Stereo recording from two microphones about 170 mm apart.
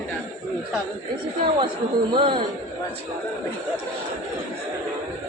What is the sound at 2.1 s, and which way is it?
Speech, 30° right (ahead or behind).